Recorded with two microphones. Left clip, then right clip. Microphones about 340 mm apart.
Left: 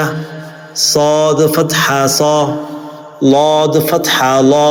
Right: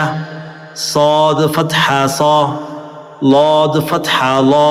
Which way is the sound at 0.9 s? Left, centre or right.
Centre.